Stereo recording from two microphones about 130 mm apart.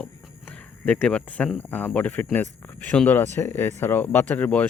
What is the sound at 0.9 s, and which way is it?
Speech, 10° left (ahead or behind).